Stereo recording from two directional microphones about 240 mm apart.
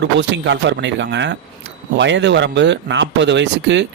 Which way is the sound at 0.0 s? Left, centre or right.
Right.